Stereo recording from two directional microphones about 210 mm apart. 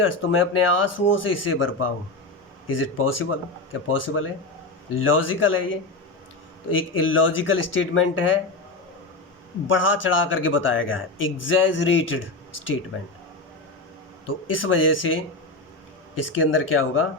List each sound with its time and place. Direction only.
0.0 s speech: 70° left (ahead or behind)
9.6 s speech: 65° left (ahead or behind)
14.6 s speech: 70° left (ahead or behind)
16.4 s speech: 75° left (ahead or behind)